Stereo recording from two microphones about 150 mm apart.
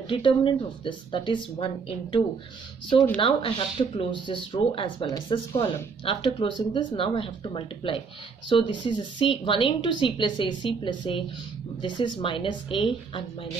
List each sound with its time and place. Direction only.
0.1 s a woman's voice: 35° left (ahead or behind)
3.2 s a woman's voice: 35° left (ahead or behind)